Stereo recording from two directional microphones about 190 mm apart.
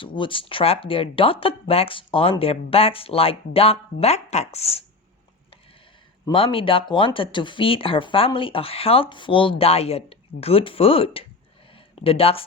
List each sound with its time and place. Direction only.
0.0 s speech: 25° left (ahead or behind)
6.2 s speech: 30° left (ahead or behind)